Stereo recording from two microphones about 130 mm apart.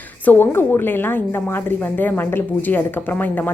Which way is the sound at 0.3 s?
15° left (ahead or behind).